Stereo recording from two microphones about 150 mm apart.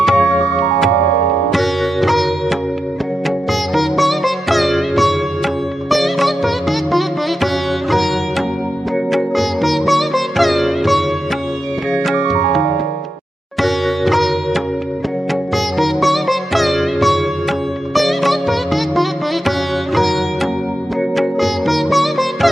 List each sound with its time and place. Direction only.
0.0 s music: centre (ahead or behind)
1.5 s sitar: centre (ahead or behind)
3.8 s sitar: centre (ahead or behind)
11.9 s music: centre (ahead or behind)
13.6 s sitar: centre (ahead or behind)
15.3 s music: centre (ahead or behind)
17.9 s sitar: centre (ahead or behind)
20.0 s music: centre (ahead or behind)
21.2 s sitar: centre (ahead or behind)